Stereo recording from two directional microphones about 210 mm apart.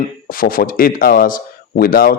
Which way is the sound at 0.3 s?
40° left (ahead or behind).